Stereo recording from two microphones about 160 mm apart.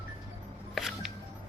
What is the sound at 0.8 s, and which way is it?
Music, centre (ahead or behind).